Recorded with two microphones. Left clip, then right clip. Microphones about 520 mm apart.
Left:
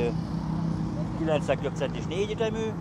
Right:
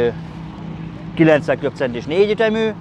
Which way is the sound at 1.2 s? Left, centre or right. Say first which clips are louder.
Right 12 dB; right.